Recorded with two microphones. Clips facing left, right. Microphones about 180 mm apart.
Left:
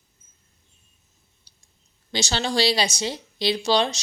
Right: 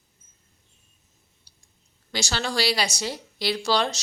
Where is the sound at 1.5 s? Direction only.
25° left (ahead or behind).